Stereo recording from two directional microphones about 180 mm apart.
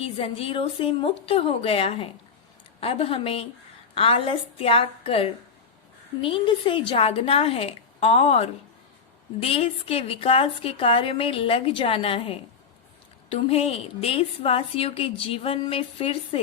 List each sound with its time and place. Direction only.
0.0 s a woman's voice: 30° left (ahead or behind)